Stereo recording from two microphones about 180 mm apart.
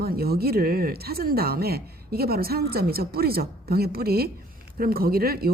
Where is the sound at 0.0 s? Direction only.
60° right (ahead or behind).